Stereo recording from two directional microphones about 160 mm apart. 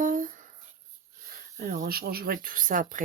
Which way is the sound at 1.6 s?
65° right (ahead or behind).